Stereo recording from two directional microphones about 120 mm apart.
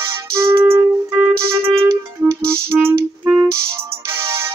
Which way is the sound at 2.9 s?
15° right (ahead or behind).